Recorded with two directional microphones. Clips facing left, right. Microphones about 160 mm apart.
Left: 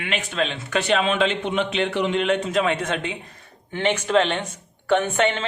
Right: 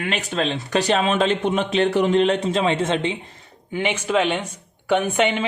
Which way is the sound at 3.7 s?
10° right (ahead or behind).